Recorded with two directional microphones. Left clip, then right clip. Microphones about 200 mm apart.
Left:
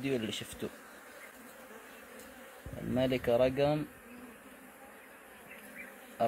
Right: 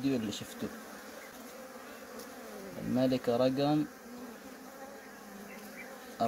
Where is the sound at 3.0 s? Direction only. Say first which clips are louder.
Left 1 dB; 15° left (ahead or behind).